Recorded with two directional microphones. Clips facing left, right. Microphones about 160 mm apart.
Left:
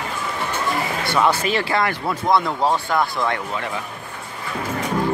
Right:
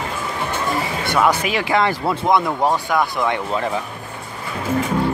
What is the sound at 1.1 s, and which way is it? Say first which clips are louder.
Speech: right 1 dB; 10° right (ahead or behind).